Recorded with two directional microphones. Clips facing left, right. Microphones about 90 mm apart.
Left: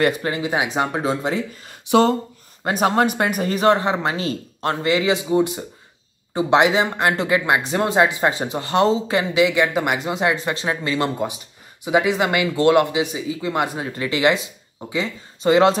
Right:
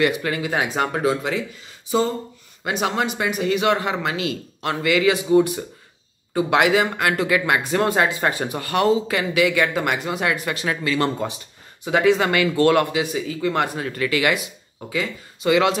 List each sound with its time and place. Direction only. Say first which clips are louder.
0.0 s speech: left 1 dB; 30° left (ahead or behind)
1.7 s speech: left 6 dB; 70° left (ahead or behind)
2.6 s speech: left 5 dB; 45° left (ahead or behind); by 11.1 s 25° left (ahead or behind)
11.8 s speech: right 1 dB; 15° left (ahead or behind); by 15.8 s 35° left (ahead or behind)